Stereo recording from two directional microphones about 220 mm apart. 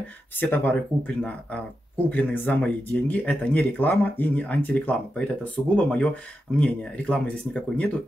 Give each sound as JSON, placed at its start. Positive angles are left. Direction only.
{"t": 0.4, "sound": "speech", "side_deg": 10}